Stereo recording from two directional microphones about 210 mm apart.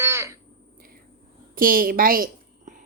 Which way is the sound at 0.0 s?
10° right (ahead or behind).